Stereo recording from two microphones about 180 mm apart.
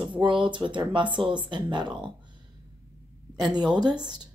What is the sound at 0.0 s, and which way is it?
Speech, 30° right (ahead or behind).